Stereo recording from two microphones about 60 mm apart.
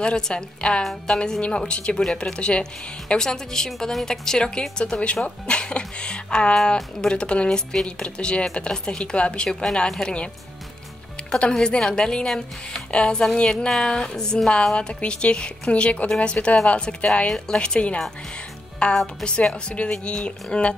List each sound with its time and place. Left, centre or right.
0.0 s speech: centre
11.5 s speech: centre